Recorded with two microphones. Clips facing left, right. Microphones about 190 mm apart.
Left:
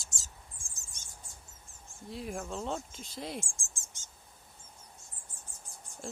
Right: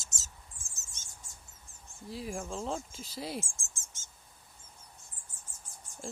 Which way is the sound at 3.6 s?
15° left (ahead or behind).